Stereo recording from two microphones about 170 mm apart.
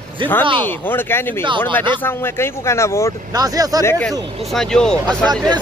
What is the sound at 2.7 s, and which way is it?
Speech, 15° left (ahead or behind).